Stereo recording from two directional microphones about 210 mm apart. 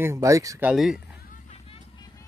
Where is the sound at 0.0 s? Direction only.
15° right (ahead or behind).